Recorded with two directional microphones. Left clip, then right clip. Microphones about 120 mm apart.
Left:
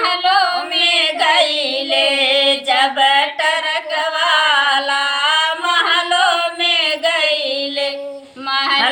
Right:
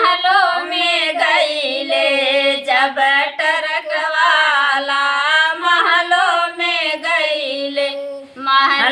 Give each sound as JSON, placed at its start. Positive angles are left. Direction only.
{"t": 0.0, "sound": "music", "side_deg": -10}
{"t": 0.5, "sound": "child singing", "side_deg": 25}
{"t": 1.9, "sound": "female singing", "side_deg": 25}
{"t": 8.4, "sound": "a sound", "side_deg": -10}